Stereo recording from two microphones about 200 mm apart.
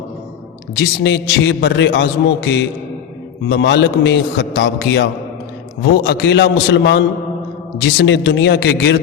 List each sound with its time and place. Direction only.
0.8 s a man's voice: 60° left (ahead or behind)